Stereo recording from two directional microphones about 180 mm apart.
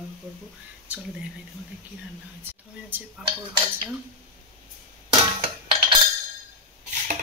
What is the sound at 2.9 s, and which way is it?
Speech, 10° right (ahead or behind).